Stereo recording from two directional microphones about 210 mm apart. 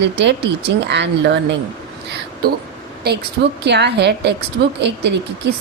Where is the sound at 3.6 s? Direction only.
55° right (ahead or behind).